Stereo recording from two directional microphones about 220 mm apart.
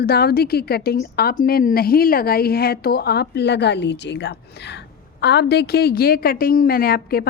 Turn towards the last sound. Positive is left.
turn(degrees=45)  # may be behind; listen again after turning